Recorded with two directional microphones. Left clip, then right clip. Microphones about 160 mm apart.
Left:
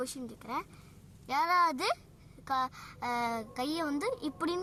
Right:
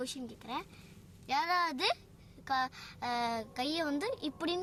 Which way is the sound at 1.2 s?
5° right (ahead or behind).